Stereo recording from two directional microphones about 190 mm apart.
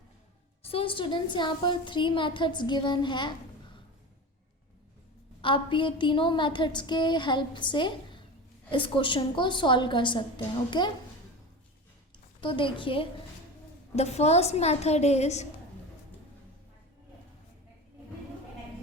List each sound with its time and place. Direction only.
0.6 s a woman's voice: 30° left (ahead or behind)
5.4 s a woman's voice: 25° left (ahead or behind)
12.4 s a woman's voice: 25° left (ahead or behind)